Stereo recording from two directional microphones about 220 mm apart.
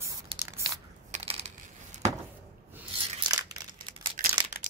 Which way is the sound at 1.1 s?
30° right (ahead or behind).